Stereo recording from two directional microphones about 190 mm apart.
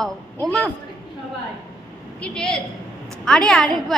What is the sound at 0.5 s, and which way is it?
Speech, centre (ahead or behind).